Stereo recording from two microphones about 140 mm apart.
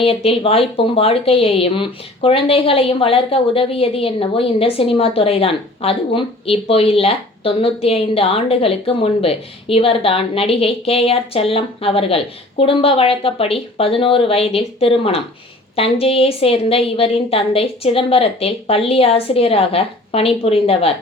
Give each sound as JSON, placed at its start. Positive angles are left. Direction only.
{"t": 0.0, "sound": "speech", "side_deg": 45}